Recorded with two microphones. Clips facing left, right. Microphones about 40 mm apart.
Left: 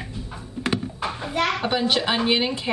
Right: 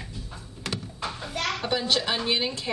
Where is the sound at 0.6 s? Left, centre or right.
Left.